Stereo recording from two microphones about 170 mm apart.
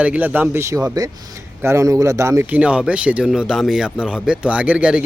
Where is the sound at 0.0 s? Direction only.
10° right (ahead or behind).